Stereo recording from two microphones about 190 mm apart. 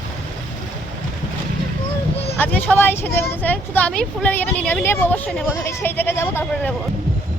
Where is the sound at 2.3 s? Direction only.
10° left (ahead or behind).